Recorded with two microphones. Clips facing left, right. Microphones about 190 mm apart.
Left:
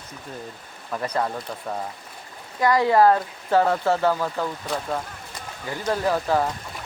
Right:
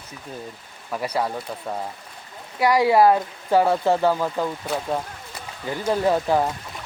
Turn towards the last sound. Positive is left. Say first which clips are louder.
# right 2 dB
turn(degrees=-20)  # may be behind; listen again after turning